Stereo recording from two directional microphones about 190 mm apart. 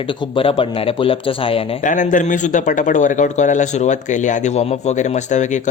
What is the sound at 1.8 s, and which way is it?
Speech, 40° left (ahead or behind).